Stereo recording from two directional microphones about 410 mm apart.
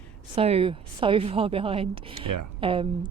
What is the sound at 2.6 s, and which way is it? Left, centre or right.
Speech, centre.